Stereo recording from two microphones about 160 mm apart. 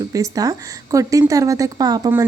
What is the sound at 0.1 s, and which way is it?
Speech, 20° right (ahead or behind).